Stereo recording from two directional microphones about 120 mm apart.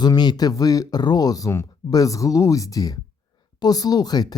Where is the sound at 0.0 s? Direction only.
35° left (ahead or behind).